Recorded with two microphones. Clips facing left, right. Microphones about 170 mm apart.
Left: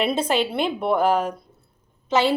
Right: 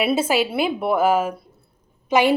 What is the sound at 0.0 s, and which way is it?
A woman's voice, 5° right (ahead or behind).